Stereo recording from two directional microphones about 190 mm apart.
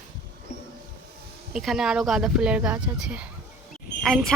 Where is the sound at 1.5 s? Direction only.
Centre (ahead or behind).